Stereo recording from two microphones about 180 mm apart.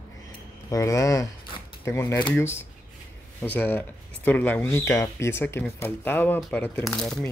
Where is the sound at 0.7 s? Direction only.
15° left (ahead or behind).